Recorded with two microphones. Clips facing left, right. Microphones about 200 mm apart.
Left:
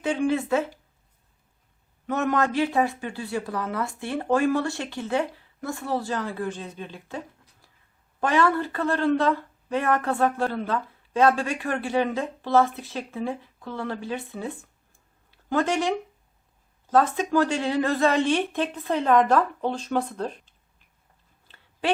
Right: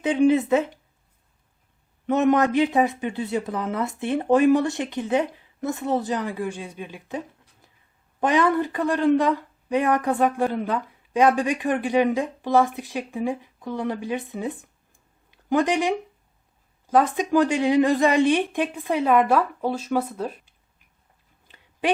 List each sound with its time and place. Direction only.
0.0 s speech: 20° right (ahead or behind)
2.0 s speech: 20° right (ahead or behind)
8.2 s a woman's voice: 15° right (ahead or behind)
21.4 s a sound: 15° right (ahead or behind)